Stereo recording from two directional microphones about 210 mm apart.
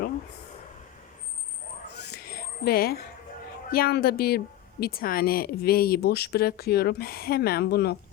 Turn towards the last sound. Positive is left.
turn(degrees=50)  # may be behind; listen again after turning